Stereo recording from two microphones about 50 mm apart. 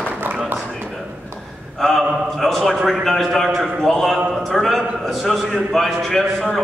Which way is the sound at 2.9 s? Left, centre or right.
Centre.